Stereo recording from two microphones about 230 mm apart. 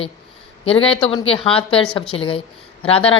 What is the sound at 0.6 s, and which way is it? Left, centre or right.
A woman's voice, left.